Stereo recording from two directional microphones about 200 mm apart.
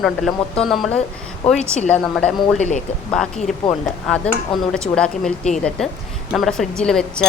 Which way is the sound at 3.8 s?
5° left (ahead or behind).